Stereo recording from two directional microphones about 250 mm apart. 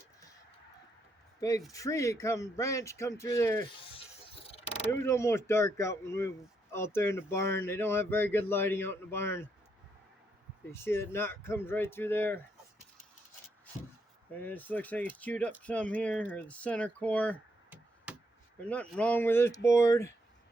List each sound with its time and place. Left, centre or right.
1.4 s speech: centre
3.9 s vehicle: left
4.9 s speech: centre
10.7 s speech: centre
14.3 s speech: centre
17.7 s chop: centre
18.6 s speech: centre